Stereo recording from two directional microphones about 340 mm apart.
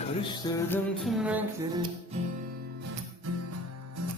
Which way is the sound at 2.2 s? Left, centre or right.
Centre.